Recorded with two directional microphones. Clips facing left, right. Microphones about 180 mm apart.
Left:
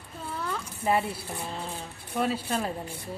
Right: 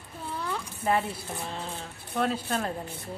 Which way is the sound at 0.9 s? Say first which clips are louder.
Left 1 dB; 5° left (ahead or behind).